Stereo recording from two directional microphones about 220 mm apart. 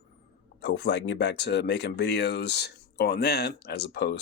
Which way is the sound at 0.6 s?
50° left (ahead or behind).